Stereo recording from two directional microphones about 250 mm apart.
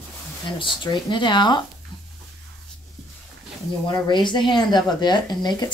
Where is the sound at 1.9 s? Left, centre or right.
Centre.